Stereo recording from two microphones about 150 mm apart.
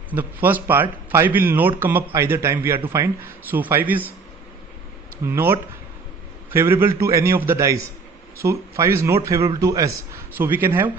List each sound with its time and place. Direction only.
0.1 s speech: 10° right (ahead or behind)
5.2 s speech: 15° right (ahead or behind)